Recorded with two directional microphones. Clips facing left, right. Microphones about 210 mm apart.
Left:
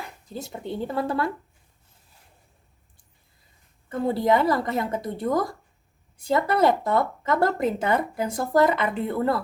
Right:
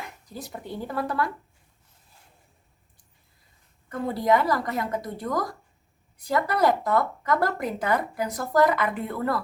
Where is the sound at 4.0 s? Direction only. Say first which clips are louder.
Left 2 dB; 25° left (ahead or behind).